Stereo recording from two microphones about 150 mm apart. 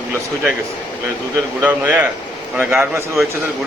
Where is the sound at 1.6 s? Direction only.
10° right (ahead or behind).